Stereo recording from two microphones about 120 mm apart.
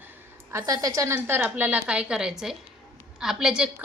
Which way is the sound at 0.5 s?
30° right (ahead or behind).